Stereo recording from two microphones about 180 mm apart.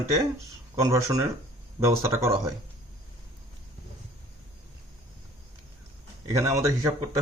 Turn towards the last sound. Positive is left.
turn(degrees=-20)  # may be behind; listen again after turning